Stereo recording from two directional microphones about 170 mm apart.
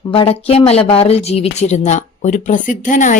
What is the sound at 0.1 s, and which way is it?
Speech, 30° left (ahead or behind).